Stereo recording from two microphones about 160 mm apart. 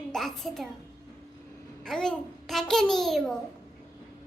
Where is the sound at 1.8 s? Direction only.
5° left (ahead or behind).